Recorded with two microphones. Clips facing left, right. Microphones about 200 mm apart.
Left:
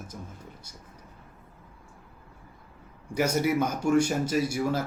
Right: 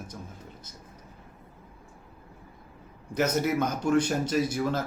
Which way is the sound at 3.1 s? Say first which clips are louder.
Left 1 dB; 10° left (ahead or behind).